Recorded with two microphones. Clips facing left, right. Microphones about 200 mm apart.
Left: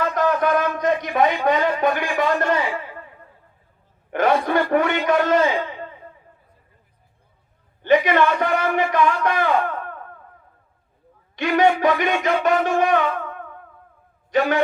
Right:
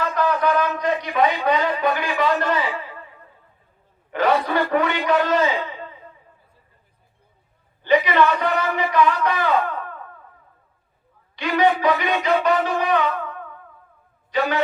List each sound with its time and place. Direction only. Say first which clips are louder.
0.0 s a man's voice: left 1 dB; 50° left (ahead or behind)
4.1 s a man's voice: left 1 dB; 50° left (ahead or behind)
7.8 s speech: left 1 dB; 50° left (ahead or behind)
11.3 s a man's voice: left 2 dB; 50° left (ahead or behind)